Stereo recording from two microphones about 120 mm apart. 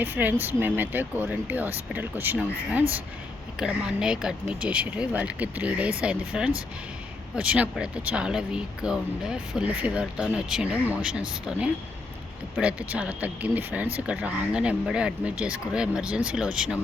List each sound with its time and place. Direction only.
0.0 s speech: 15° right (ahead or behind)